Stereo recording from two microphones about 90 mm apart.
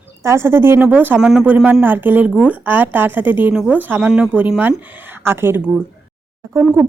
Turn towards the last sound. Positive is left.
turn(degrees=-25)  # may be behind; listen again after turning